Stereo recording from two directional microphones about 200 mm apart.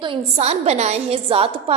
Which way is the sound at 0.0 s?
30° right (ahead or behind).